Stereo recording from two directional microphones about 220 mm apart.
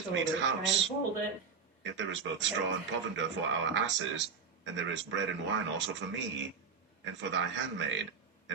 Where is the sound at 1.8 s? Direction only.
55° right (ahead or behind).